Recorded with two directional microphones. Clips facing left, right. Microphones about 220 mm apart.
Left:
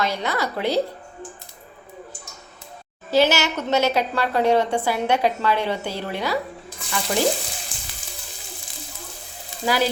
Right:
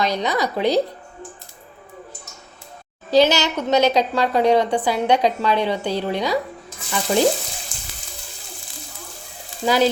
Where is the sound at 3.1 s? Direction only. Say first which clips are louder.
Right 3 dB; 15° right (ahead or behind).